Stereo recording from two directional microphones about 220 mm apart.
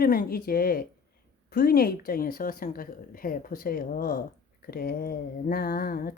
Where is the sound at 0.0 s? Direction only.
40° left (ahead or behind).